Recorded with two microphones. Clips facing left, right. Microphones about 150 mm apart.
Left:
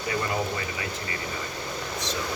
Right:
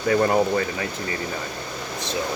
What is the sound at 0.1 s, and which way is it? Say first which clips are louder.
Speech: right 10 dB; 55° right (ahead or behind).